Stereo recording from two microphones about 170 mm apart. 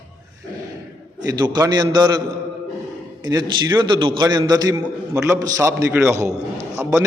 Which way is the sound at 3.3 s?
25° right (ahead or behind).